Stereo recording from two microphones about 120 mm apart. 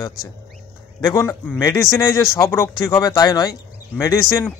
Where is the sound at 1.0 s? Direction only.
25° left (ahead or behind).